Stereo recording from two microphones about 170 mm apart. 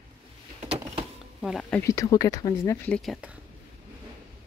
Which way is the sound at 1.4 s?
Centre (ahead or behind).